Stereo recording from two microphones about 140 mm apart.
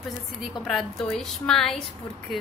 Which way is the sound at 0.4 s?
Centre (ahead or behind).